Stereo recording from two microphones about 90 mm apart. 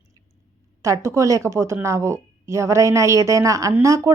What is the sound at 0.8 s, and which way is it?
Speech, 35° right (ahead or behind).